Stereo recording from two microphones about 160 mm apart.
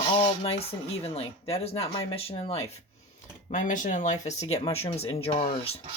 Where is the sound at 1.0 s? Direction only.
40° left (ahead or behind).